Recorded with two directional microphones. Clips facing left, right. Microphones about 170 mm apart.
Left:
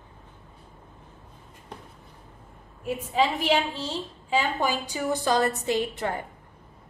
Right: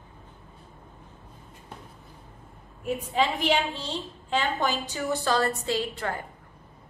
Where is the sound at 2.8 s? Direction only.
Centre (ahead or behind); by 6.2 s 20° left (ahead or behind).